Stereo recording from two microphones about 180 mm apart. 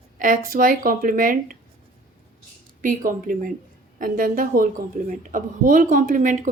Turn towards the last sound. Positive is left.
turn(degrees=-45)  # may be behind; listen again after turning